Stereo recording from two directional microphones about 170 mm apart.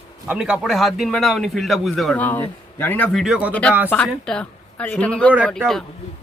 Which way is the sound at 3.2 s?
5° right (ahead or behind).